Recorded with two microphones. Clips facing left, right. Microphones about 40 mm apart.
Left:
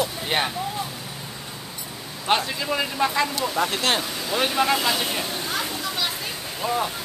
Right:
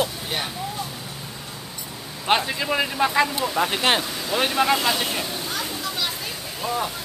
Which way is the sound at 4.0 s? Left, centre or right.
Centre.